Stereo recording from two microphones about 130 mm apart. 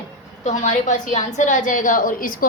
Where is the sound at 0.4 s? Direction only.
75° left (ahead or behind).